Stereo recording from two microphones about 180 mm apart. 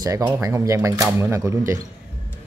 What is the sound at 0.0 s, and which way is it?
Speech, 20° right (ahead or behind).